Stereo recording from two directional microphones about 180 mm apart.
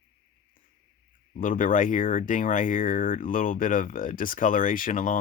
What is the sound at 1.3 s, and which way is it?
Speech, 50° left (ahead or behind).